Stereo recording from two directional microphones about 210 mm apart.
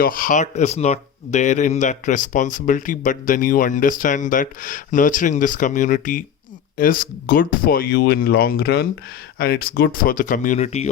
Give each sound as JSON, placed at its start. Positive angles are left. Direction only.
{"t": 0.0, "sound": "speech", "side_deg": 40}